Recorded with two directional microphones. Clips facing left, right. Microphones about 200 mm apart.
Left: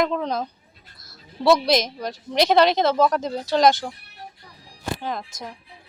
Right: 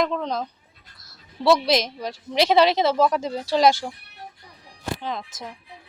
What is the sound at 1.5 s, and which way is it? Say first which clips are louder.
A woman's voice: left 1 dB; 5° right (ahead or behind).